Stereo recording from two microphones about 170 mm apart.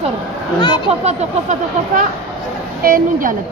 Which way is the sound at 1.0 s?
45° right (ahead or behind).